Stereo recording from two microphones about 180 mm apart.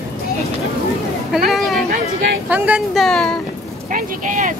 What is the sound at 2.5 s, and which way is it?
Speech, 10° right (ahead or behind).